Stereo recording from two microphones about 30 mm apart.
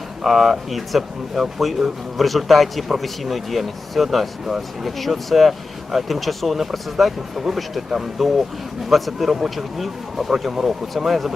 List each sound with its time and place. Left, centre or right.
0.2 s speech: centre